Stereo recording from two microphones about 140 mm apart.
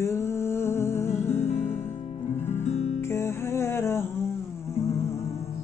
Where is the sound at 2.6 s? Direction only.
55° left (ahead or behind).